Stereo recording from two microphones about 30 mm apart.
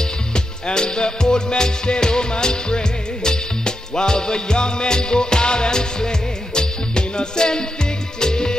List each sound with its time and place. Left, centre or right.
0.0 s music: left